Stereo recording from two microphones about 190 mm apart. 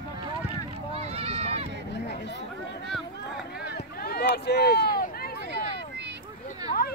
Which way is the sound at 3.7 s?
55° left (ahead or behind).